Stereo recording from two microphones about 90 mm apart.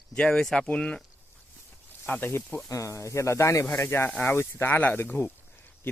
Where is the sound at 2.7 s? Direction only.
35° left (ahead or behind); by 5.3 s 20° left (ahead or behind).